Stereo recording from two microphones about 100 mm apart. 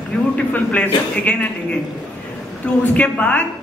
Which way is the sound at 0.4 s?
15° left (ahead or behind).